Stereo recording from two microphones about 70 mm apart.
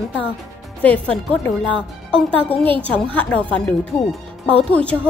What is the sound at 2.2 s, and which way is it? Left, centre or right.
Speech, centre.